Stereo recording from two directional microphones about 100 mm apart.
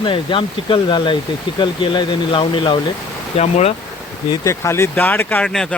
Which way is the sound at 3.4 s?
90° left.